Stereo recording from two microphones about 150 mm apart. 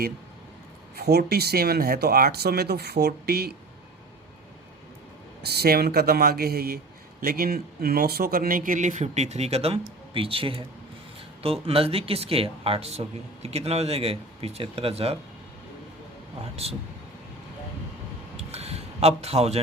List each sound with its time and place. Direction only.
0.9 s speech: 90° right
5.5 s speech: 90° right; by 15.2 s 40° right (ahead or behind)
18.5 s a sound: 45° right (ahead or behind)